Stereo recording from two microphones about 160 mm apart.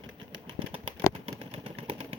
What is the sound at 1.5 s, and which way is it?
Vehicle, 35° right (ahead or behind).